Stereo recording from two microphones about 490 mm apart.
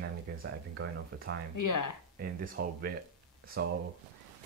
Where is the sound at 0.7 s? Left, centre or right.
Right.